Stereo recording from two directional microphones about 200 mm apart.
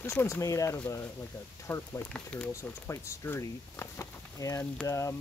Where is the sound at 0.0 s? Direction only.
15° left (ahead or behind).